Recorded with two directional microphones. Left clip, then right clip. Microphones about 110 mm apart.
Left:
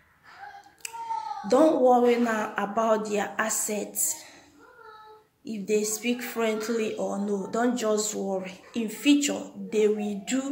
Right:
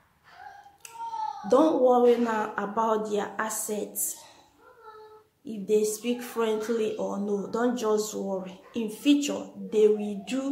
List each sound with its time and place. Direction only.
1.5 s speech: 20° right (ahead or behind)
5.4 s speech: 20° right (ahead or behind)